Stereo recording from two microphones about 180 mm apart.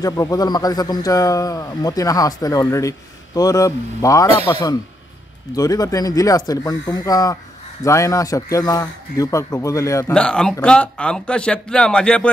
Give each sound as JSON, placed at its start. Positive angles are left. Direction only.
{"t": 0.0, "sound": "a man's voice", "side_deg": 20}
{"t": 10.1, "sound": "speech", "side_deg": 5}